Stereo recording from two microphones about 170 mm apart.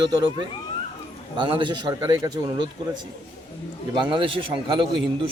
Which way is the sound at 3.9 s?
30° right (ahead or behind).